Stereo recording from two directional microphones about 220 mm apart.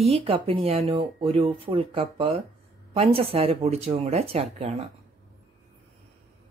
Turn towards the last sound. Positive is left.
turn(degrees=-25)  # may be behind; listen again after turning